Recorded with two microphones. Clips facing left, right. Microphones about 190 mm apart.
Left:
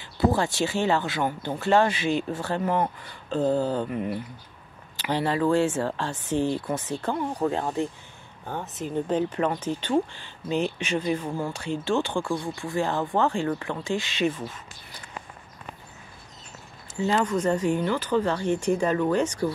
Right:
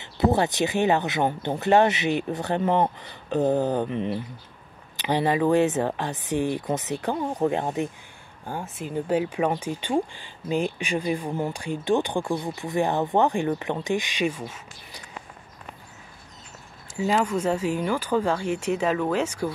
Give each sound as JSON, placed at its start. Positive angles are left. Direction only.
{"t": 0.0, "sound": "speech", "side_deg": -20}
{"t": 17.0, "sound": "speech", "side_deg": -10}